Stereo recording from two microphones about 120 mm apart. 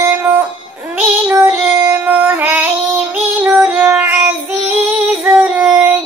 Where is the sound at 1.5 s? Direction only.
15° right (ahead or behind).